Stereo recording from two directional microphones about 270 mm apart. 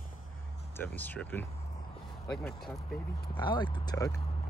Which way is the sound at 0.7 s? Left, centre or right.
Centre.